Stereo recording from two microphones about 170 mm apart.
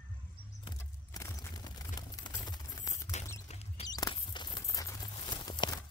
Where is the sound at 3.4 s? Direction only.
40° left (ahead or behind).